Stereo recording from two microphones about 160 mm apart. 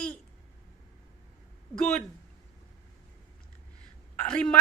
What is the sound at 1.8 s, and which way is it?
Speech, 5° left (ahead or behind).